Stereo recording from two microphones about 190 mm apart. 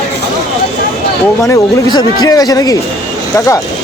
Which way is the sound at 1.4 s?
20° left (ahead or behind).